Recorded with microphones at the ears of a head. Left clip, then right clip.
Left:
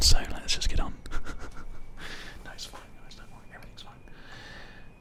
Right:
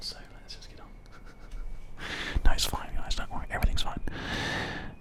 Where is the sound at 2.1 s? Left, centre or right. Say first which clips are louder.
Right 10 dB; right.